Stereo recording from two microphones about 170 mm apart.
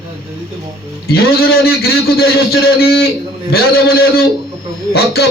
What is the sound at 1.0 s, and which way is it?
A man's voice, 65° left (ahead or behind).